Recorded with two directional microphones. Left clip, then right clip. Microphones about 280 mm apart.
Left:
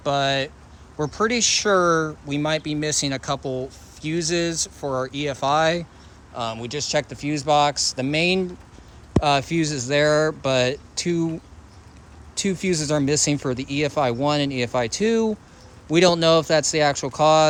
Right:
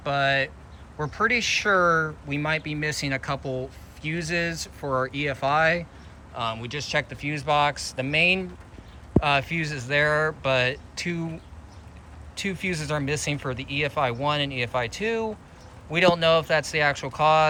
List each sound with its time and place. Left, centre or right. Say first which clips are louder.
0.0 s speech: left 2 dB; centre
12.3 s speech: left 5 dB; centre